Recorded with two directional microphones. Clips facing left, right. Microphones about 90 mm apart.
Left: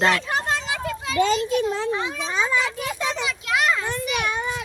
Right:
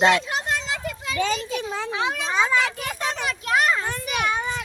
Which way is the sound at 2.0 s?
75° right (ahead or behind).